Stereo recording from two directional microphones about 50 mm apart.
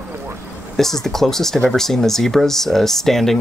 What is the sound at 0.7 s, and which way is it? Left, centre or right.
Speech, centre.